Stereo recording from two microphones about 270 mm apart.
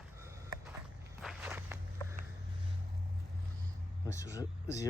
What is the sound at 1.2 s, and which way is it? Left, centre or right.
Walk, centre.